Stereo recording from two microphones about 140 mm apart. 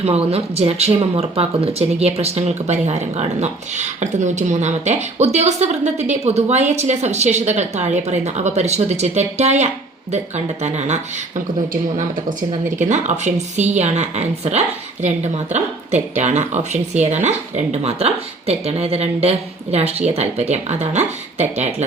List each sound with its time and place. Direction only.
0.0 s speech: 45° right (ahead or behind)
12.6 s speech: 60° right (ahead or behind)